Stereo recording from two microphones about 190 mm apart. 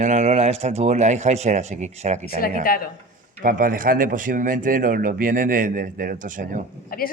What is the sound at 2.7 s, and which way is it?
Speech, 50° left (ahead or behind).